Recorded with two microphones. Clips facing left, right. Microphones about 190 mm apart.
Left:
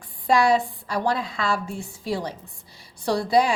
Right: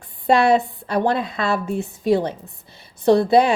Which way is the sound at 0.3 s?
25° right (ahead or behind).